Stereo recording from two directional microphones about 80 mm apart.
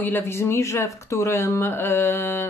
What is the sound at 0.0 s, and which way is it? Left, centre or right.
Speech, left.